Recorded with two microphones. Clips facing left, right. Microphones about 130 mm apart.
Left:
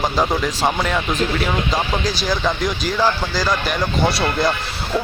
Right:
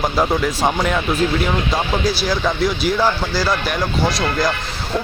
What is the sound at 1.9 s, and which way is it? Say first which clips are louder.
Speech: right 2 dB; 5° right (ahead or behind).